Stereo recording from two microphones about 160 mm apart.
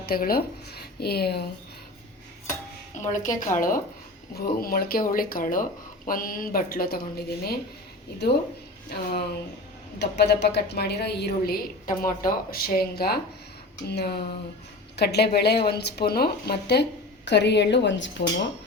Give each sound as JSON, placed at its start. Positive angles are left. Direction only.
{"t": 0.0, "sound": "a woman's voice", "side_deg": 70}
{"t": 2.9, "sound": "a woman's voice", "side_deg": 50}
{"t": 4.4, "sound": "a woman's voice", "side_deg": 70}
{"t": 8.9, "sound": "a woman's voice", "side_deg": 80}
{"t": 13.8, "sound": "a woman's voice", "side_deg": 85}
{"t": 14.9, "sound": "a woman's voice", "side_deg": 90}